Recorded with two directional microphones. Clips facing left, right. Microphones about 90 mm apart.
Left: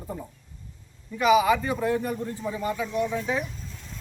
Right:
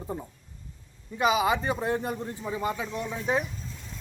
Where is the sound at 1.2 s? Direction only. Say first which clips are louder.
Left 4 dB; 25° right (ahead or behind).